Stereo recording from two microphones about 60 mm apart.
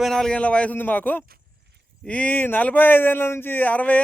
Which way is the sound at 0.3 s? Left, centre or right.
Left.